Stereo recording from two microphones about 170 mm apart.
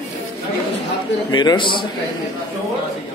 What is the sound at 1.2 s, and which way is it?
Speech, 25° left (ahead or behind).